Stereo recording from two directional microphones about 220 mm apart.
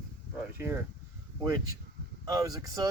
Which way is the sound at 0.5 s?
10° right (ahead or behind).